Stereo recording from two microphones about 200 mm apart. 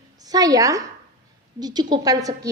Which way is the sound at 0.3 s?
20° right (ahead or behind).